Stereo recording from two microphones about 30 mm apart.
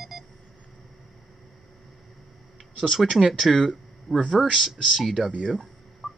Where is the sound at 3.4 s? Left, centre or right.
Centre.